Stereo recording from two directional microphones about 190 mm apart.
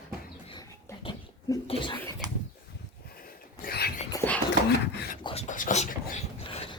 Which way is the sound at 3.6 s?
55° left (ahead or behind).